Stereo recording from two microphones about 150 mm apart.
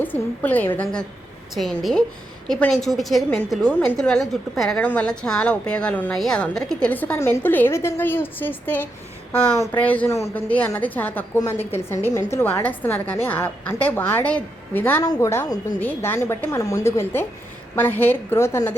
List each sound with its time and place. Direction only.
0.0 s a woman's voice: 10° left (ahead or behind)